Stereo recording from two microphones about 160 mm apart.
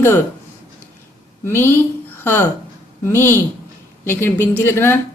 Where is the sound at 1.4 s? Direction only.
15° left (ahead or behind).